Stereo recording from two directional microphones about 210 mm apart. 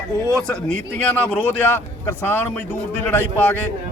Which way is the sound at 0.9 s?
5° left (ahead or behind).